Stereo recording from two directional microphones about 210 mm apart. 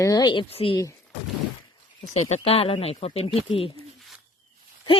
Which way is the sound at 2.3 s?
30° left (ahead or behind).